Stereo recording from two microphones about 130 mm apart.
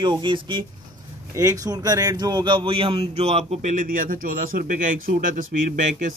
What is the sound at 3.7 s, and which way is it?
Speech, 90° right.